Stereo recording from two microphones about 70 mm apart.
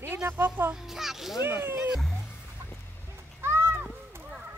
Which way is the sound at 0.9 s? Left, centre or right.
Centre.